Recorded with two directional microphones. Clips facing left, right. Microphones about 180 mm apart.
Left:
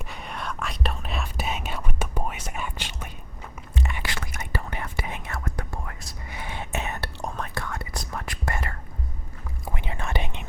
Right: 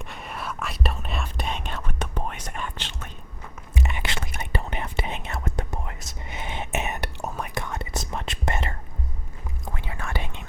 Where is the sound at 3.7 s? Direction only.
20° right (ahead or behind).